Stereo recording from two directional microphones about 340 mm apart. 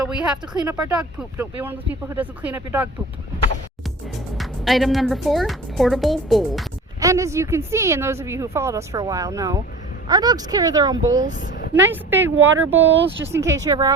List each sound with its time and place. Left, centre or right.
0.0 s speech: centre
4.4 s a woman's voice: centre